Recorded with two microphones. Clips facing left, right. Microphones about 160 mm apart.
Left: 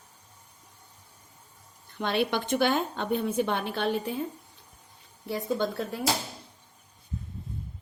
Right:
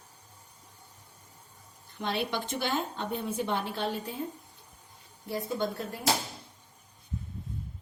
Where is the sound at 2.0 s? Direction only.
65° left (ahead or behind).